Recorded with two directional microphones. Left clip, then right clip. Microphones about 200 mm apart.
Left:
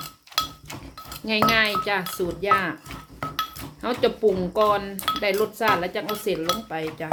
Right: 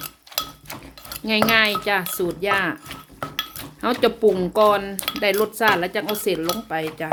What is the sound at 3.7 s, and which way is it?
Speech, 35° right (ahead or behind).